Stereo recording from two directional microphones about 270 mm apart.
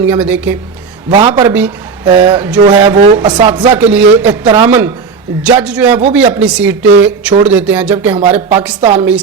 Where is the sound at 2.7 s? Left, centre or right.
Centre.